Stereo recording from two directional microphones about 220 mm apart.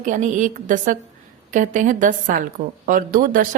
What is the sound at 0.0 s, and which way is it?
A woman's voice, 35° right (ahead or behind).